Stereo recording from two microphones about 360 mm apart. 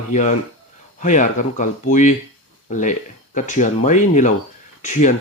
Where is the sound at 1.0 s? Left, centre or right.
Left.